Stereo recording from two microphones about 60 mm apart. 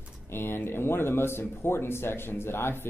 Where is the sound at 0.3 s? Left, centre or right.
Left.